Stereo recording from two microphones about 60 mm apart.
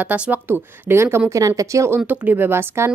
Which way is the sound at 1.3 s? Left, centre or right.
Right.